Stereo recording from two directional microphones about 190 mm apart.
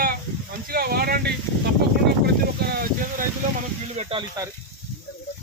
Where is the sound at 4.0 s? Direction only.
30° right (ahead or behind).